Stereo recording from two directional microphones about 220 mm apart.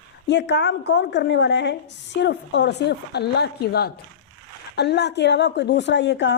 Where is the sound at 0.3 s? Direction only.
50° left (ahead or behind).